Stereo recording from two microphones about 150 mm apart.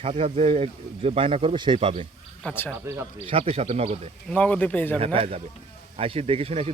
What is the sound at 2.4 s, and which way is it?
Speech, 10° left (ahead or behind).